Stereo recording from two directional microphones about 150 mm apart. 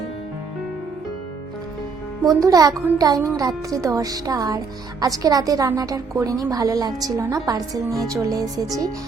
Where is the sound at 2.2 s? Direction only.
25° right (ahead or behind).